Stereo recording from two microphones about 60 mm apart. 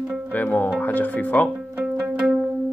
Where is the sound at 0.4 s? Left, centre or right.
Left.